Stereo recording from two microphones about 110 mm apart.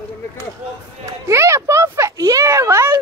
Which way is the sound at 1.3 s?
25° right (ahead or behind).